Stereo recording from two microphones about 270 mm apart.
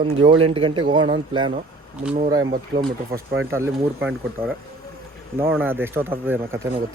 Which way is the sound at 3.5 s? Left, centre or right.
Centre.